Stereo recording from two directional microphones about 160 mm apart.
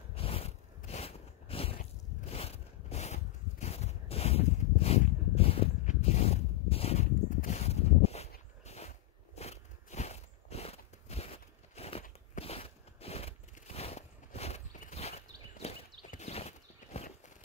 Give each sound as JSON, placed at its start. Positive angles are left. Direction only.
{"t": 0.1, "sound": "biting", "side_deg": 35}
{"t": 2.2, "sound": "a sound", "side_deg": 40}
{"t": 8.6, "sound": "biting", "side_deg": 40}
{"t": 15.6, "sound": "horse", "side_deg": 45}